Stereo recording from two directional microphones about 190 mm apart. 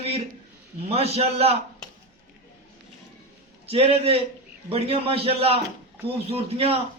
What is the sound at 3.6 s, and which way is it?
A man's voice, 30° right (ahead or behind).